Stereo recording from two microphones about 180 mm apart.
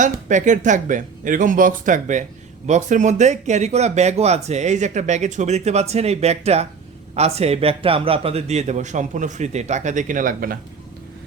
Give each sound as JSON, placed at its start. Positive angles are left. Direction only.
{"t": 0.0, "sound": "speech", "side_deg": -45}